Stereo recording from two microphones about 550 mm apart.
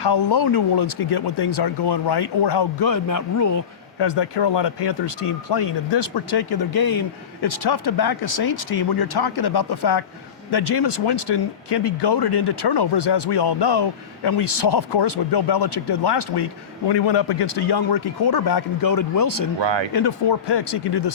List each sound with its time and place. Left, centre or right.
0.0 s speech: left
4.0 s speech: left
19.5 s speech: right
19.9 s speech: left